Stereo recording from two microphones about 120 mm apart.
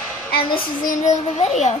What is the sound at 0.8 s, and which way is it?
Speech, 90° left.